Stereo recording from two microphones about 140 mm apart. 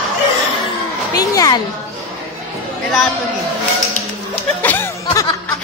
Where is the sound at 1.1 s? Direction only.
25° left (ahead or behind).